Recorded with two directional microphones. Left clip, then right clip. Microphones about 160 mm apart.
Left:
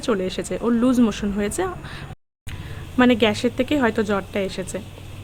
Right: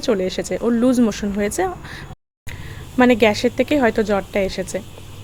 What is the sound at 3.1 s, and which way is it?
A woman's voice, 15° right (ahead or behind).